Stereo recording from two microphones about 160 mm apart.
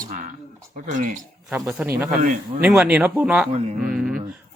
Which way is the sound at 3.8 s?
5° right (ahead or behind).